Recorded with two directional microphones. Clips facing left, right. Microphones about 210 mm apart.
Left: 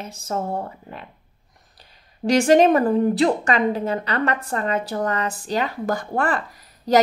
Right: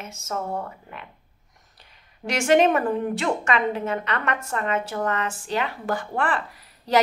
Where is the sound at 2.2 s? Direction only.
35° left (ahead or behind).